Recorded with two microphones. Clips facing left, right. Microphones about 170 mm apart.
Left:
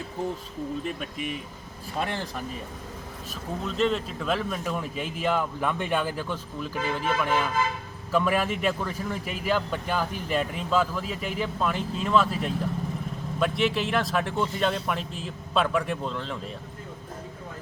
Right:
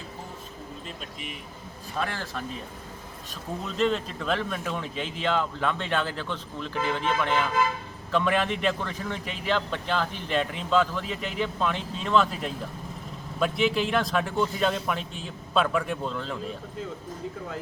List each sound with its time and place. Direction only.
2.0 s speech: 20° left (ahead or behind)
3.8 s a man's voice: centre (ahead or behind)